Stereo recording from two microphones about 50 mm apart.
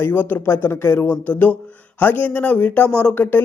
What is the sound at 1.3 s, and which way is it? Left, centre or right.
Speech, left.